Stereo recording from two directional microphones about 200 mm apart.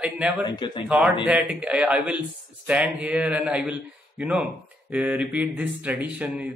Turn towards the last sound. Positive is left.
turn(degrees=-5)  # may be behind; listen again after turning